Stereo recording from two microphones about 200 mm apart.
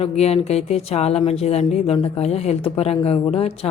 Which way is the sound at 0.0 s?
30° left (ahead or behind).